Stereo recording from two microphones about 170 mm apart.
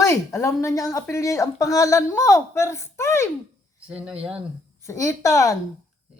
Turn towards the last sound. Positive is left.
turn(degrees=20)  # may be behind; listen again after turning